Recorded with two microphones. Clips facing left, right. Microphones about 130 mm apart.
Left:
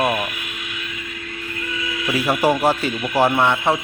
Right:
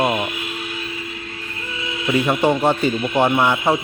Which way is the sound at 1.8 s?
25° right (ahead or behind).